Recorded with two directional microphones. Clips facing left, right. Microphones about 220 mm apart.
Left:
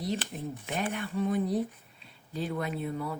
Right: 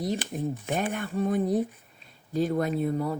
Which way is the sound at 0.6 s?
45° right (ahead or behind).